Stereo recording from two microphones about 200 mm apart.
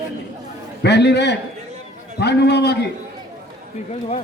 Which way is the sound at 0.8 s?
60° left (ahead or behind).